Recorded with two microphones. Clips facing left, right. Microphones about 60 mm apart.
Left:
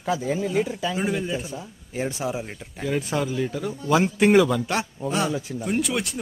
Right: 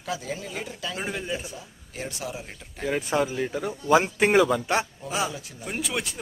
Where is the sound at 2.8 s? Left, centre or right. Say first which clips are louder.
Even; centre.